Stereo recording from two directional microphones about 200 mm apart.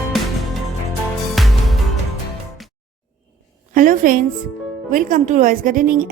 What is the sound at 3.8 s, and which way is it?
A woman's voice, 45° right (ahead or behind).